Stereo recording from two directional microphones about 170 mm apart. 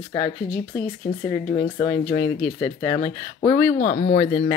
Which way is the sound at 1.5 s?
25° left (ahead or behind).